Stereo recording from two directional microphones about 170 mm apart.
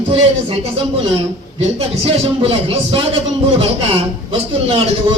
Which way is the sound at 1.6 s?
35° right (ahead or behind).